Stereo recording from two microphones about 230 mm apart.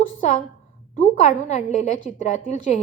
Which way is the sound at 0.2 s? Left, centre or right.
Left.